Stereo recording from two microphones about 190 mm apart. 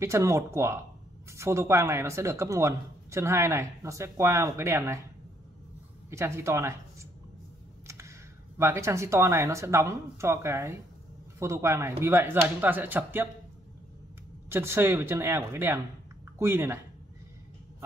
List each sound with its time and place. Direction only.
0.0 s speech: 15° right (ahead or behind)
6.0 s speech: 15° right (ahead or behind)
7.8 s computer keyboard: 15° right (ahead or behind)
8.5 s speech: 15° right (ahead or behind)
14.5 s speech: 10° right (ahead or behind)